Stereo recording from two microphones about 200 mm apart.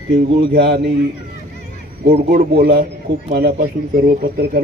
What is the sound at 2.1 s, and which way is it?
Speech, 45° right (ahead or behind).